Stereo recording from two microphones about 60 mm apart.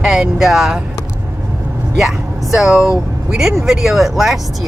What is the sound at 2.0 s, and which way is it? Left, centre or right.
Speech, centre.